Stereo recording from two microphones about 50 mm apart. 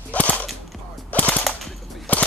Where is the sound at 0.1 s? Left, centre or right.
Left.